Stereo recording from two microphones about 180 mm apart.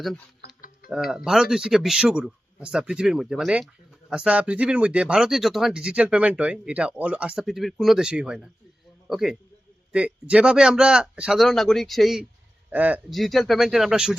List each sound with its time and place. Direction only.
0.4 s mechanisms: 55° left (ahead or behind)
0.9 s speech: centre (ahead or behind)